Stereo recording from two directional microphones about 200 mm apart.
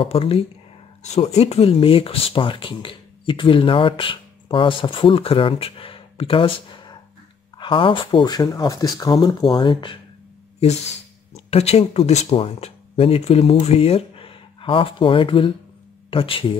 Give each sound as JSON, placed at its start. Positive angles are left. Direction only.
{"t": 0.0, "sound": "speech", "side_deg": 30}
{"t": 11.3, "sound": "speech", "side_deg": 30}